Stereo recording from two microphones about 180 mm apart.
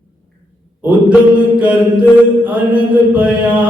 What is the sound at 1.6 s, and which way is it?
Mantra, 10° right (ahead or behind).